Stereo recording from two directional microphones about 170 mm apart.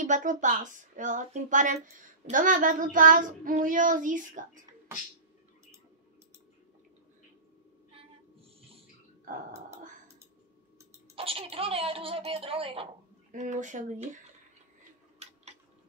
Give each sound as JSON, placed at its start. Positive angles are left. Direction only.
{"t": 0.0, "sound": "a woman's voice", "side_deg": -45}
{"t": 11.1, "sound": "speech", "side_deg": -35}
{"t": 13.3, "sound": "a woman's voice", "side_deg": -45}